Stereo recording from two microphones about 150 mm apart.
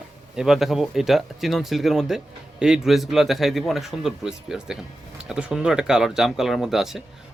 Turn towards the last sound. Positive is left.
turn(degrees=0)  # may be behind; listen again after turning